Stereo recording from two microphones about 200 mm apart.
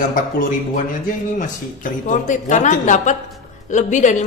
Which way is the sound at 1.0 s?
40° left (ahead or behind).